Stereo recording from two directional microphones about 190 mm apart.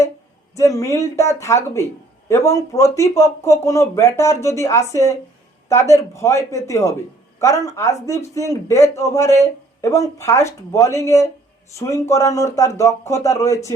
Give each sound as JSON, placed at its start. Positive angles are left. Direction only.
{"t": 0.5, "sound": "speech", "side_deg": 15}